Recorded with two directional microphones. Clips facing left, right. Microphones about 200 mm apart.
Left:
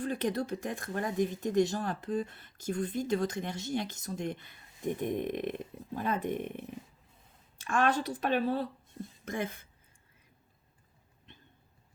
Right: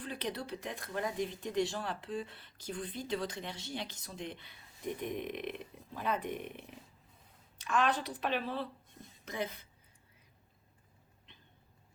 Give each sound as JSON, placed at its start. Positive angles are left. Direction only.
{"t": 0.0, "sound": "speech", "side_deg": 45}
{"t": 7.6, "sound": "speech", "side_deg": 50}